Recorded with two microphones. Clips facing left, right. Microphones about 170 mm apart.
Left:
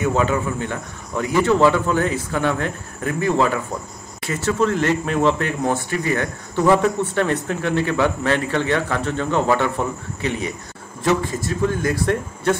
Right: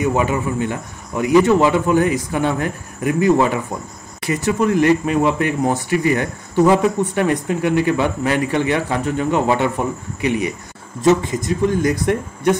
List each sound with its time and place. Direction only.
0.0 s speech: 10° right (ahead or behind)